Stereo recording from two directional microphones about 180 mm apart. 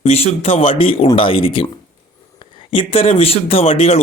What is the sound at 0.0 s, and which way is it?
Speech, 35° left (ahead or behind).